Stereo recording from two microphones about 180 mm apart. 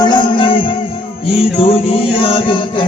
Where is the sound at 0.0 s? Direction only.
25° left (ahead or behind).